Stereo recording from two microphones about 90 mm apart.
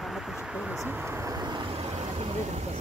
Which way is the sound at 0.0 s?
Centre (ahead or behind).